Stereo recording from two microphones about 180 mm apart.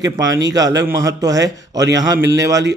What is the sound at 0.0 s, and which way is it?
A man's voice, 20° right (ahead or behind).